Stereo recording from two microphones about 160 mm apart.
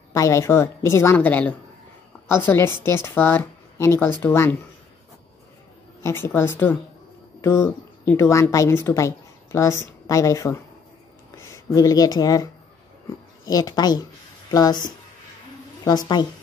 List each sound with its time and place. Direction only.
0.1 s speech: 20° left (ahead or behind)
6.0 s speech: 15° left (ahead or behind)
13.5 s a woman's voice: 25° left (ahead or behind)